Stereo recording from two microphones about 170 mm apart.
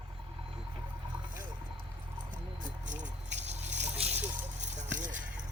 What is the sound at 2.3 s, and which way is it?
Drip, 50° right (ahead or behind).